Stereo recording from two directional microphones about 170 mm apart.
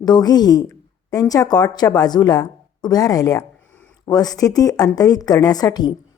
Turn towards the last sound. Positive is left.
turn(degrees=25)  # may be behind; listen again after turning